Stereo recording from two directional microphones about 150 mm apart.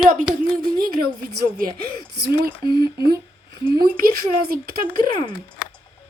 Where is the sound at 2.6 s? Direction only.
30° left (ahead or behind).